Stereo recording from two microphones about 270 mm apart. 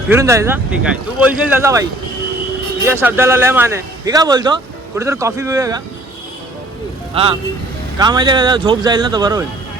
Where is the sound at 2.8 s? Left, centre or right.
Centre.